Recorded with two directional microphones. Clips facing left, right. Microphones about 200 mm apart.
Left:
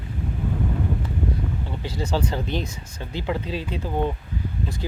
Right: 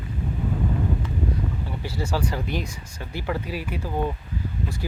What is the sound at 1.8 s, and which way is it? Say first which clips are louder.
Speech: left 2 dB; 20° left (ahead or behind).